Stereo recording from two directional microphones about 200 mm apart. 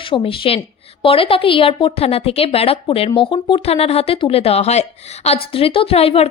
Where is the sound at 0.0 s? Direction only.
25° left (ahead or behind).